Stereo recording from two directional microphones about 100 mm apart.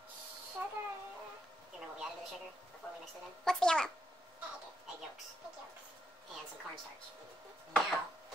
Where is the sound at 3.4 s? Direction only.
5° left (ahead or behind).